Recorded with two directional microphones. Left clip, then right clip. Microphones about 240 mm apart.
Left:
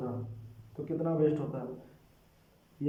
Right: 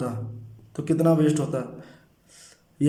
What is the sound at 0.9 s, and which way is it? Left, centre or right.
Speech, right.